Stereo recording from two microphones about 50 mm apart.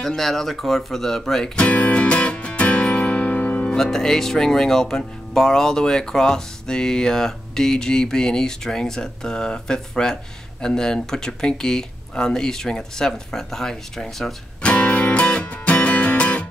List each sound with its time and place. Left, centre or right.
0.0 s speech: centre
1.6 s music: left
3.6 s speech: centre
14.6 s music: left